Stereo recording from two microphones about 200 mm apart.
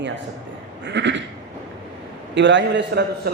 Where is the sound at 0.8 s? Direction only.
60° right (ahead or behind).